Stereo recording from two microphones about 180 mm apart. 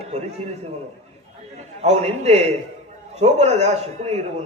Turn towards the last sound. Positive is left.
turn(degrees=-35)  # may be behind; listen again after turning